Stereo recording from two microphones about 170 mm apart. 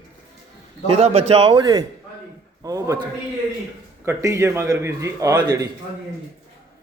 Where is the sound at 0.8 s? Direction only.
35° right (ahead or behind); by 3.0 s 20° right (ahead or behind).